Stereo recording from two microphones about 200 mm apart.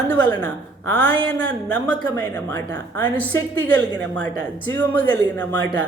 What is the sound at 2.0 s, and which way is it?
A man's voice, 20° left (ahead or behind).